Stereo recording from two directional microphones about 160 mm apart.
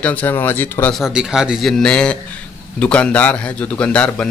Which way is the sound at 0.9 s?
Centre (ahead or behind).